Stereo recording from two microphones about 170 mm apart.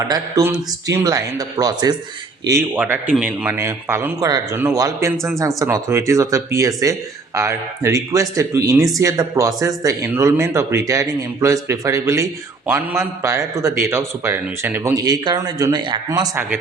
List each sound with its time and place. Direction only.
0.1 s a man's voice: 20° right (ahead or behind)
5.1 s speech: centre (ahead or behind)
5.4 s a man's voice: 15° right (ahead or behind)